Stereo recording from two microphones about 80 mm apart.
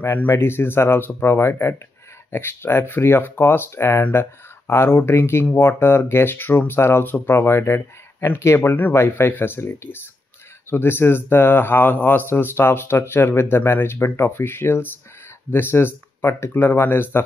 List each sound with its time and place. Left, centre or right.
0.0 s speech: left